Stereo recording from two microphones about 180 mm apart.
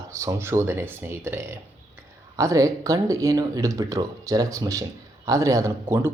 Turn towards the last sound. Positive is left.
turn(degrees=-15)  # may be behind; listen again after turning